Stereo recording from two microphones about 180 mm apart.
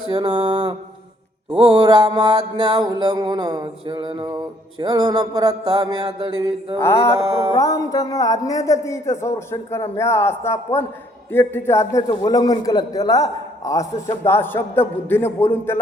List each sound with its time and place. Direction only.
0.1 s mantra: 30° right (ahead or behind)
6.7 s music: 15° left (ahead or behind)
11.3 s a man's voice: 15° left (ahead or behind)
14.1 s music: 15° left (ahead or behind)